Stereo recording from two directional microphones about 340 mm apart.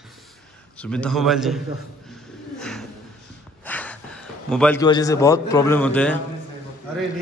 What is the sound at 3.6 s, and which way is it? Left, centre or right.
A man's voice, centre.